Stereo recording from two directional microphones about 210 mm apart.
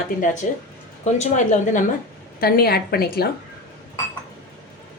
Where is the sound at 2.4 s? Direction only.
45° left (ahead or behind).